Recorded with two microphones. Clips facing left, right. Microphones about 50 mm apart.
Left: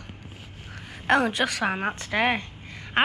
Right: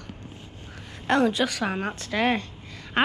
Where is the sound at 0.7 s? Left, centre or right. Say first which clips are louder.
Left 1 dB; centre.